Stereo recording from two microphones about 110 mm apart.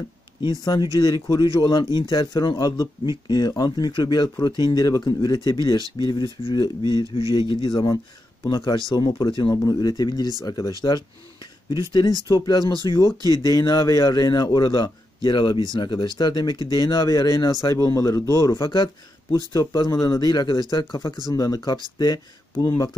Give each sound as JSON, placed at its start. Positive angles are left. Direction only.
{"t": 0.9, "sound": "speech", "side_deg": 40}
{"t": 12.3, "sound": "speech", "side_deg": 40}
{"t": 13.2, "sound": "speech", "side_deg": -35}
{"t": 13.5, "sound": "speech", "side_deg": 35}
{"t": 18.5, "sound": "speech", "side_deg": 40}